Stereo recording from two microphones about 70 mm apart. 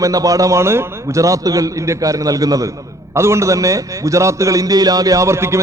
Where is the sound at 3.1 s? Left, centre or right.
Right.